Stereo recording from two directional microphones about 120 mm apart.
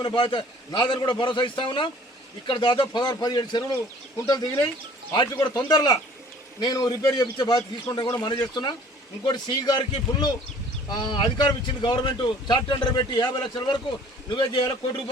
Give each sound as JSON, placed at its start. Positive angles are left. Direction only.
{"t": 0.0, "sound": "speech", "side_deg": 35}